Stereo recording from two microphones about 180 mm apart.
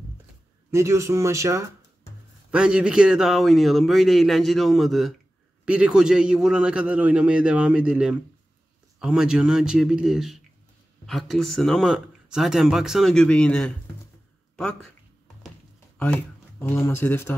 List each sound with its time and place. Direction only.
0.7 s speech: 15° right (ahead or behind)
2.5 s speech: 5° right (ahead or behind)
16.0 s speech: 10° left (ahead or behind)